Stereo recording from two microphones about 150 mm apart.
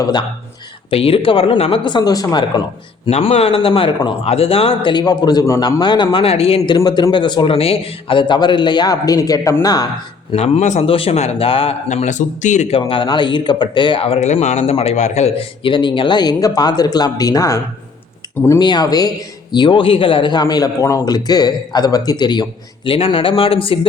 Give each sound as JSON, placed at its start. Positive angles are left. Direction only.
{"t": 0.0, "sound": "a man's voice", "side_deg": 30}
{"t": 3.1, "sound": "speech", "side_deg": 45}
{"t": 6.7, "sound": "a man's voice", "side_deg": 25}
{"t": 10.3, "sound": "speech", "side_deg": 45}
{"t": 11.9, "sound": "a man's voice", "side_deg": 55}
{"t": 18.6, "sound": "a man's voice", "side_deg": 30}